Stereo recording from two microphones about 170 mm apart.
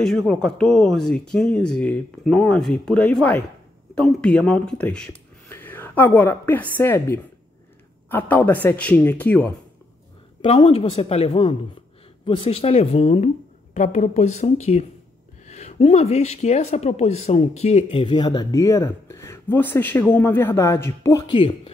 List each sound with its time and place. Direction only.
0.0 s speech: centre (ahead or behind)
10.4 s a woman's voice: 35° left (ahead or behind); by 21.3 s 20° left (ahead or behind)
21.3 s speech: 30° left (ahead or behind)